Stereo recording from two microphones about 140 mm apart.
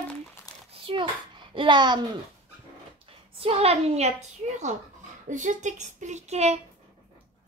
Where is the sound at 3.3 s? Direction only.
45° right (ahead or behind).